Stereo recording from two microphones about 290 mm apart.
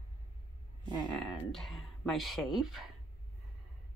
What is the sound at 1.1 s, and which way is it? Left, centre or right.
A woman's voice, centre.